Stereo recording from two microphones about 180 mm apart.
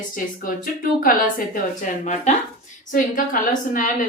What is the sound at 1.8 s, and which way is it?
A woman's voice, 40° left (ahead or behind).